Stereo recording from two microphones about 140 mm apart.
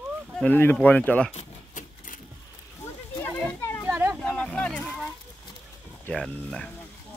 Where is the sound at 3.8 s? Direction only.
15° right (ahead or behind).